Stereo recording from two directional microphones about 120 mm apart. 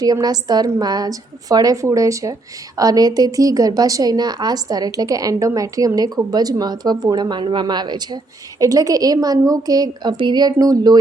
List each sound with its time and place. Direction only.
0.0 s a woman's voice: 35° right (ahead or behind)